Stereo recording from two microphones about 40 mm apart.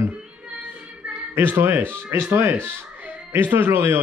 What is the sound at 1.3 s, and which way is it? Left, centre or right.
Speech, right.